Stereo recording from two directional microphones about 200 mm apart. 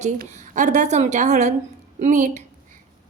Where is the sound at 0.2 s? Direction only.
40° right (ahead or behind).